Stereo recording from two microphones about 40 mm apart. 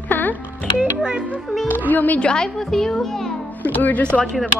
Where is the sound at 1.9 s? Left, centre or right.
Left.